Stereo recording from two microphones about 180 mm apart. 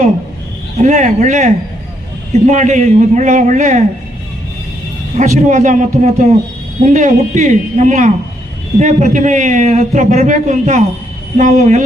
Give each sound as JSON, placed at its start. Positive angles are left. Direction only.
{"t": 0.8, "sound": "a man's voice", "side_deg": -40}
{"t": 5.1, "sound": "a man's voice", "side_deg": -40}